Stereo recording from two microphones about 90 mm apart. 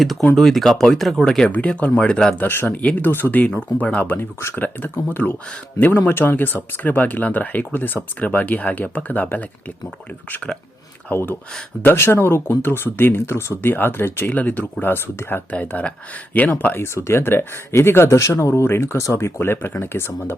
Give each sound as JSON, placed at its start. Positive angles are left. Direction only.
{"t": 0.0, "sound": "speech", "side_deg": 0}
{"t": 2.5, "sound": "speech", "side_deg": 25}